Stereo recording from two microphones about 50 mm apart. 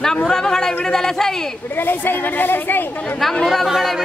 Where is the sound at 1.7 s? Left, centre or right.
Left.